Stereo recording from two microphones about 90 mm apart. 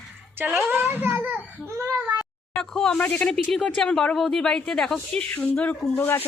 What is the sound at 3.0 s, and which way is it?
Speech, 20° left (ahead or behind).